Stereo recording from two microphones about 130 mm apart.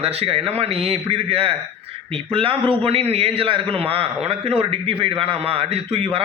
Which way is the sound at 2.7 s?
50° right (ahead or behind).